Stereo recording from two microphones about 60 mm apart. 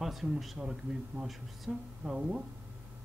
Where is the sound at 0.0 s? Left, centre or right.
Centre.